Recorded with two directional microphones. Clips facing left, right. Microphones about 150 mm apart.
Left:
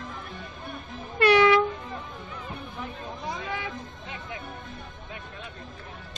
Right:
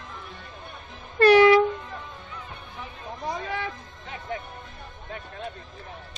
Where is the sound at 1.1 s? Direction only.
40° right (ahead or behind).